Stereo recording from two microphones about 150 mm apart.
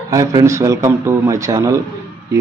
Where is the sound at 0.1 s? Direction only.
20° right (ahead or behind).